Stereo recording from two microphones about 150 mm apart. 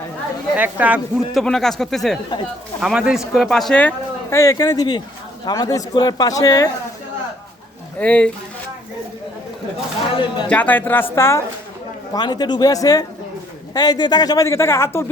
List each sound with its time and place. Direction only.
0.5 s speech: 10° right (ahead or behind); by 6.7 s 25° left (ahead or behind)
7.9 s speech: 10° left (ahead or behind)
10.2 s speech: 35° left (ahead or behind)
10.5 s speech: 10° left (ahead or behind)